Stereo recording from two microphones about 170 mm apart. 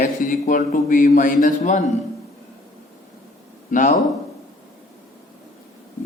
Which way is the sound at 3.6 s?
50° left (ahead or behind).